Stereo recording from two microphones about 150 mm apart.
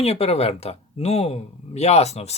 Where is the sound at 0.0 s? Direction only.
40° left (ahead or behind).